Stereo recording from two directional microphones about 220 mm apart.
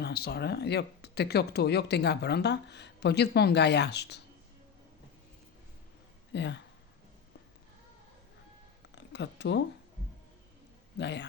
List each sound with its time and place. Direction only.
0.0 s speech: 45° left (ahead or behind)
6.3 s speech: 55° left (ahead or behind)
9.0 s speech: 50° left (ahead or behind)
10.9 s speech: 50° left (ahead or behind)